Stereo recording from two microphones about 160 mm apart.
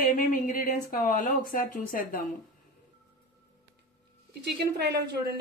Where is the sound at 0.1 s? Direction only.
55° left (ahead or behind).